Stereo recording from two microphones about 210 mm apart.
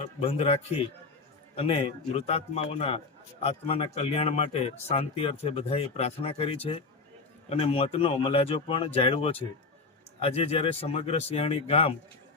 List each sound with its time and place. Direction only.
0.2 s speech: 30° left (ahead or behind)